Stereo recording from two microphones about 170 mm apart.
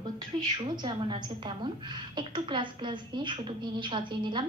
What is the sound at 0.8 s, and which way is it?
A woman's voice, 25° right (ahead or behind).